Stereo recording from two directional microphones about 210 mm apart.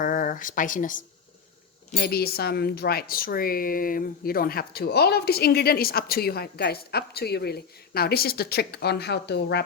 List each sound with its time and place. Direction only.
0.0 s speech: 40° left (ahead or behind)